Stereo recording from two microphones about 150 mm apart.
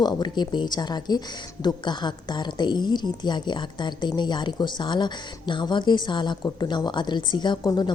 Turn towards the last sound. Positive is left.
turn(degrees=25)  # may be behind; listen again after turning